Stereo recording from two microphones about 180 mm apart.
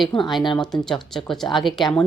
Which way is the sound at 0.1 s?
25° left (ahead or behind).